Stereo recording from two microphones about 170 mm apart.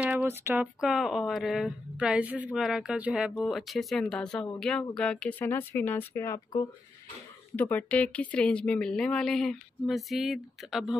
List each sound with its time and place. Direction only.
0.0 s speech: 10° right (ahead or behind)